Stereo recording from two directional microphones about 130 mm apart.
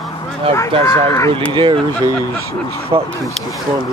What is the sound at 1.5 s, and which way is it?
Speech, 40° right (ahead or behind).